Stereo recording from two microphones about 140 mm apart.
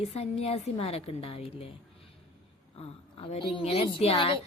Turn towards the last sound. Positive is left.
turn(degrees=40)  # may be behind; listen again after turning